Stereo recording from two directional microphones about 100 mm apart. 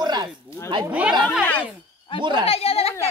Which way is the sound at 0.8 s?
15° right (ahead or behind).